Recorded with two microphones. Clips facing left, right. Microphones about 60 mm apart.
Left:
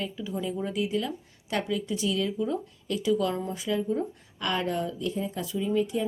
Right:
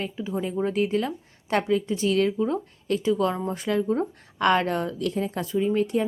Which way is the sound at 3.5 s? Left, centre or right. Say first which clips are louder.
Right 4 dB; right.